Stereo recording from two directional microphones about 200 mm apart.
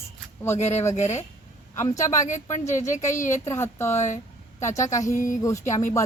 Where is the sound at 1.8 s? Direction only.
15° left (ahead or behind).